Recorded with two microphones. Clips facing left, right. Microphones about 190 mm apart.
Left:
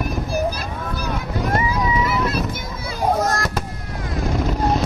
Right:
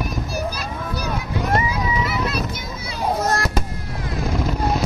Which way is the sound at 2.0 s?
50° left (ahead or behind).